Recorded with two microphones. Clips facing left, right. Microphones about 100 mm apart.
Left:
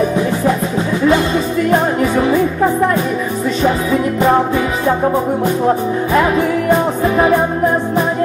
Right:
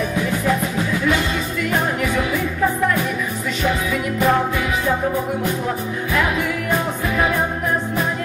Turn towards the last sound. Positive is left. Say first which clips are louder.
# left 8 dB
turn(degrees=30)  # may be behind; listen again after turning